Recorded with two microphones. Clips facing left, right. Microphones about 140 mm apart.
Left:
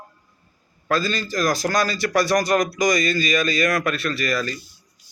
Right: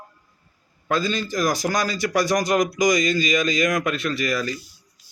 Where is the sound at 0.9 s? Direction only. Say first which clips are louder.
Even; 20° right (ahead or behind).